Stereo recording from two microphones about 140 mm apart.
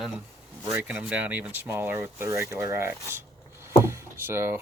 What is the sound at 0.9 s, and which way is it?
Speech, 10° right (ahead or behind).